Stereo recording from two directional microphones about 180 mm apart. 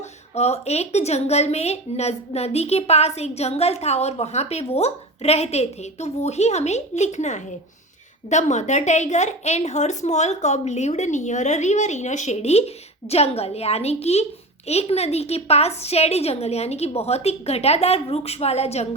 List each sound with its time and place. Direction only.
0.3 s a woman's voice: 35° left (ahead or behind)